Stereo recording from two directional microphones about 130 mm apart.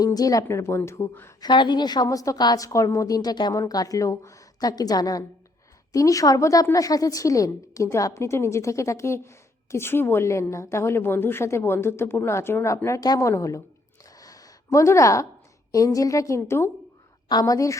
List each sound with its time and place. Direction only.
0.0 s a woman's voice: 30° left (ahead or behind)
1.4 s a woman's voice: 35° left (ahead or behind)
14.2 s a sound: 25° left (ahead or behind)
15.7 s a woman's voice: 25° left (ahead or behind)